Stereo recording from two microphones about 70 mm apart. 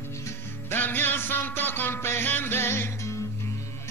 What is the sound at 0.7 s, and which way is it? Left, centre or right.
Music, left.